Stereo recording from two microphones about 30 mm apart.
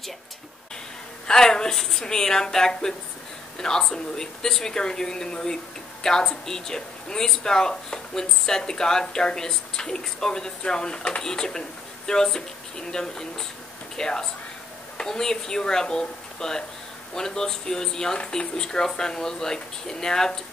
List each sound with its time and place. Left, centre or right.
1.2 s speech: left